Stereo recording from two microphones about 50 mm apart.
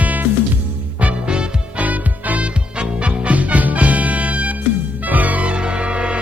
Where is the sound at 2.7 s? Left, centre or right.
Centre.